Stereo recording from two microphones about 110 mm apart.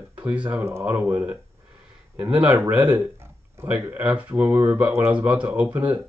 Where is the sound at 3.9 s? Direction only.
15° right (ahead or behind).